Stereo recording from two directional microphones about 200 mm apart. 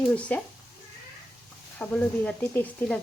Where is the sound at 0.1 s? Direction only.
5° left (ahead or behind).